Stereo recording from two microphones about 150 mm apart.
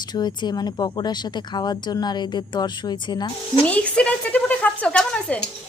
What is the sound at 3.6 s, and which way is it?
Speech, 10° left (ahead or behind).